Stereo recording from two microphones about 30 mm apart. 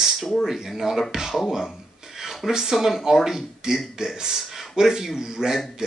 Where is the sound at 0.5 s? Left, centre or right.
Centre.